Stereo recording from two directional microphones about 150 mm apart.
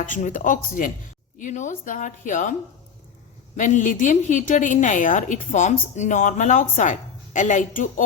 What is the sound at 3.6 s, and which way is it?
A woman's voice, 55° left (ahead or behind).